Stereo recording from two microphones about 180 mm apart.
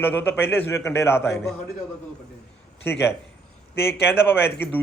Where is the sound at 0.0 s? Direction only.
10° left (ahead or behind).